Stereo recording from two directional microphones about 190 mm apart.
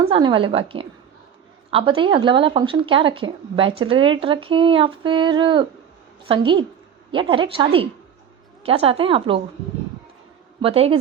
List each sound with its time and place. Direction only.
0.1 s speech: 25° right (ahead or behind)
10.6 s speech: 30° right (ahead or behind)